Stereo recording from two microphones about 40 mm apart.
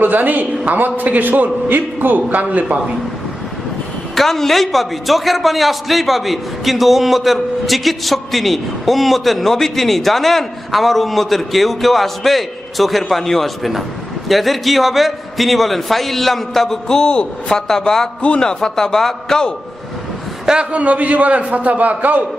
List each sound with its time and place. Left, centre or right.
0.0 s a man's voice: right
4.1 s a man's voice: centre
20.7 s a man's voice: right